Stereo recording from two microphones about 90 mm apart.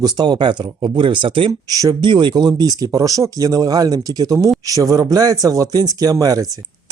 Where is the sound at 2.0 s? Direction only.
60° right (ahead or behind).